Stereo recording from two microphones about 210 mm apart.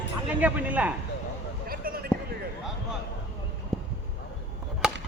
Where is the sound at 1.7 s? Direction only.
45° right (ahead or behind).